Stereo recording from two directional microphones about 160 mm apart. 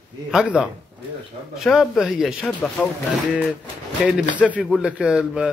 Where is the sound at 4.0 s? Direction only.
Centre (ahead or behind).